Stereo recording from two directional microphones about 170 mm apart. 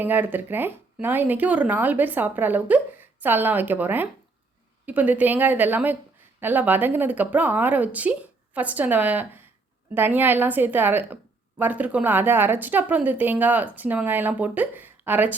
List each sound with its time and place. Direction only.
0.0 s a woman's voice: 10° right (ahead or behind)